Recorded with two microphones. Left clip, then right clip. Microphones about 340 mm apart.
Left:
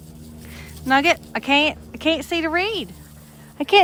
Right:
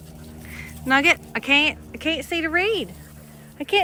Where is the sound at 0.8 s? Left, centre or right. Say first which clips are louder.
Left 1 dB; centre.